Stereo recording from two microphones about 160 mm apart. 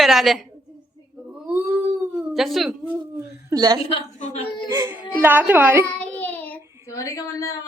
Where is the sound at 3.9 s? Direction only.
40° left (ahead or behind).